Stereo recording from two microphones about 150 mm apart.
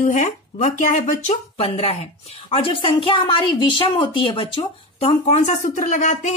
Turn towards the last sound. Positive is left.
turn(degrees=50)  # may be behind; listen again after turning